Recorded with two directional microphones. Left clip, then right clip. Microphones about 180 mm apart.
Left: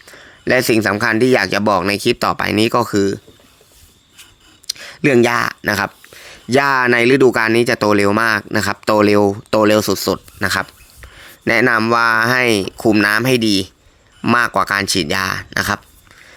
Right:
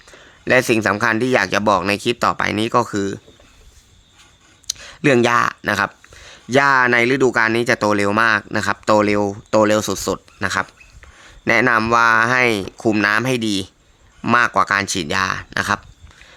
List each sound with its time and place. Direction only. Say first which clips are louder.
0.1 s speech: even; 15° left (ahead or behind)
4.6 s speech: left 1 dB; 15° left (ahead or behind)